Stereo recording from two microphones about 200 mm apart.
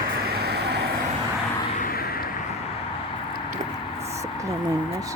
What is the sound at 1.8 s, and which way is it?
Vehicle, 45° left (ahead or behind).